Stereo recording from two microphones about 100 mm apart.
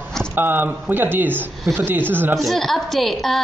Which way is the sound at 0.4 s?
20° right (ahead or behind).